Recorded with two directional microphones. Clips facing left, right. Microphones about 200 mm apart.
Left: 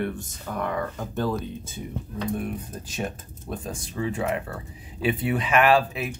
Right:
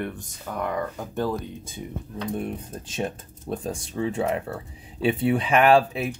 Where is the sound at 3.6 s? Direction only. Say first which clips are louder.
Right 2 dB; 30° right (ahead or behind).